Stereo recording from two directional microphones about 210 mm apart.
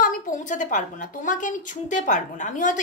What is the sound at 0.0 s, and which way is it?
A woman's voice, 35° left (ahead or behind).